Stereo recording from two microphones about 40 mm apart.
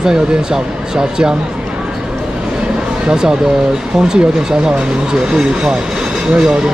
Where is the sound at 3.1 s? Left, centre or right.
Centre.